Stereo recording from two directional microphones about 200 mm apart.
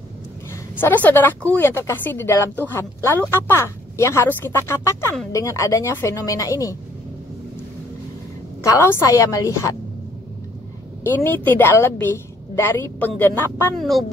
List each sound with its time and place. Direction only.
0.7 s speech: 10° left (ahead or behind)
8.6 s speech: 10° left (ahead or behind)
11.1 s speech: 10° left (ahead or behind)
13.7 s speech: centre (ahead or behind)